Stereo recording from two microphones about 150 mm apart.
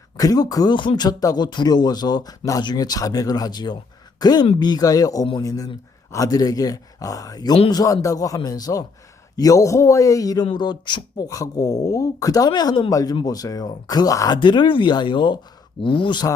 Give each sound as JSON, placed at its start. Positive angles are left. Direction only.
{"t": 0.2, "sound": "speech", "side_deg": 25}